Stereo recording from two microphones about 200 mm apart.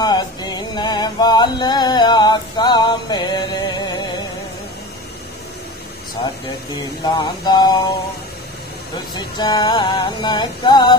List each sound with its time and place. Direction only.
0.0 s music: 20° left (ahead or behind)
7.2 s music: 20° left (ahead or behind)
9.1 s music: 20° left (ahead or behind)